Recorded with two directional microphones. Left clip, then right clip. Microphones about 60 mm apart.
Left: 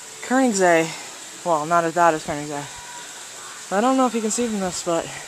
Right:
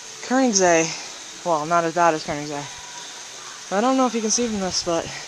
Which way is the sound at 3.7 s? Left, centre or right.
Centre.